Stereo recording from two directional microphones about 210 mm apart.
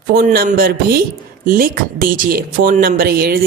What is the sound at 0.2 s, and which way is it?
Speech, 40° right (ahead or behind).